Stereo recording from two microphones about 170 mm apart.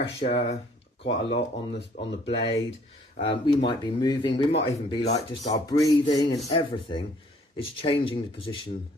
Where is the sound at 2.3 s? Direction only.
35° left (ahead or behind).